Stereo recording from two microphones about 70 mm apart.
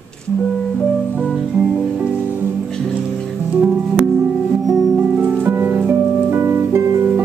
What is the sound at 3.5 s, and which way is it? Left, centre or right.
Music, right.